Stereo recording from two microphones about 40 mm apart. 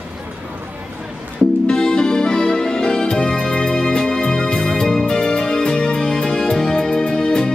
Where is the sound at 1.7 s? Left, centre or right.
Left.